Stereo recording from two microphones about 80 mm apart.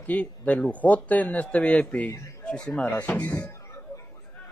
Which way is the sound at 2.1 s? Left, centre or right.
Left.